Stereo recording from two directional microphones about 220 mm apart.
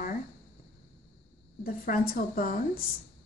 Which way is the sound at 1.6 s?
40° left (ahead or behind).